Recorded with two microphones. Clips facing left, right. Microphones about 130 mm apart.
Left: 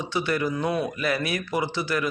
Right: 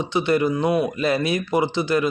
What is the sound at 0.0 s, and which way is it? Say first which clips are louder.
Speech: right 6 dB; 20° right (ahead or behind).